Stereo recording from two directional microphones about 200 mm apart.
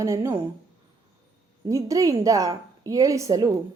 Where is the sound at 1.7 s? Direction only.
15° right (ahead or behind).